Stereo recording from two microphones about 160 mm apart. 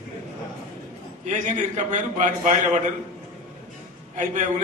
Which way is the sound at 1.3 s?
50° right (ahead or behind).